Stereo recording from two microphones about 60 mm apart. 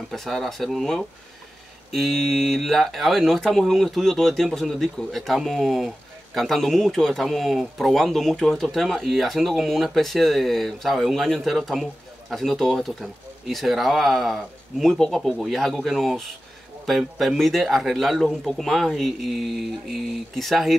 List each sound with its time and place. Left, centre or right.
0.1 s speech: centre